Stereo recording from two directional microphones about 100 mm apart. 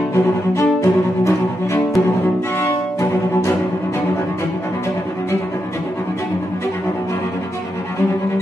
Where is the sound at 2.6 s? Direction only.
30° left (ahead or behind).